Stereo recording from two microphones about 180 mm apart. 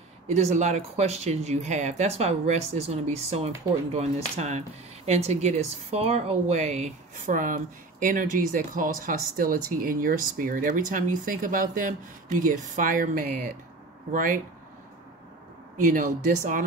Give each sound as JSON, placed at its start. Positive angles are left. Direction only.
{"t": 0.3, "sound": "speech", "side_deg": -40}
{"t": 15.8, "sound": "speech", "side_deg": -45}